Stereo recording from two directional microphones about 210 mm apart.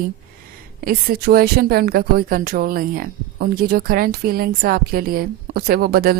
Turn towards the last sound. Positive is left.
turn(degrees=-45)  # may be behind; listen again after turning